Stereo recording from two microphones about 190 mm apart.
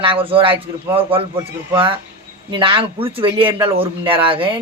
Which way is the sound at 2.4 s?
25° right (ahead or behind).